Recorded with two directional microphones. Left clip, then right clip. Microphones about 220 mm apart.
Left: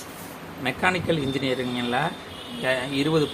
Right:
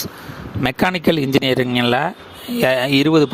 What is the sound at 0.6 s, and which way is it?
Speech, 50° right (ahead or behind).